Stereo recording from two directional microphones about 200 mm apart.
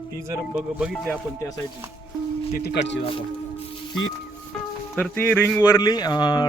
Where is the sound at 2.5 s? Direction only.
50° left (ahead or behind).